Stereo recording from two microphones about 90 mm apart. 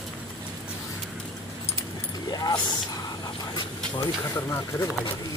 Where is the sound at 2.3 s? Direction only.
50° left (ahead or behind).